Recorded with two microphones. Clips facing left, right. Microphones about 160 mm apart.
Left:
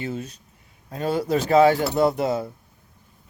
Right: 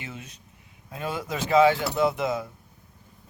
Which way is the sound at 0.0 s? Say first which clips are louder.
Left 10 dB; 35° left (ahead or behind).